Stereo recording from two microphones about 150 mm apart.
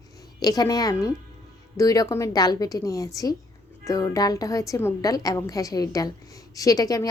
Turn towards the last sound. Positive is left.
turn(degrees=25)  # may be behind; listen again after turning